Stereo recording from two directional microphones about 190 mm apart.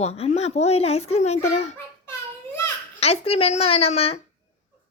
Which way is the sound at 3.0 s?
30° left (ahead or behind).